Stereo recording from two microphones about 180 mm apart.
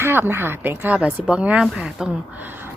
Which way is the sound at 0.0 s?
15° right (ahead or behind).